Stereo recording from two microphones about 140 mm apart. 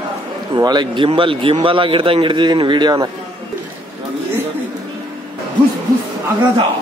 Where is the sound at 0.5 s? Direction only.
30° right (ahead or behind).